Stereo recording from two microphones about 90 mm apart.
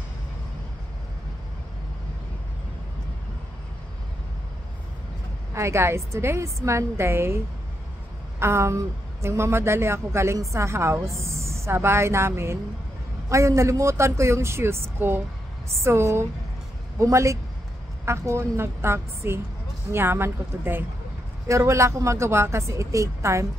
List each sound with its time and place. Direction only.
5.5 s a woman's voice: 30° right (ahead or behind)